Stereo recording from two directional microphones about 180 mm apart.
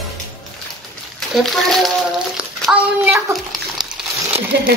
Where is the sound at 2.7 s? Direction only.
5° right (ahead or behind).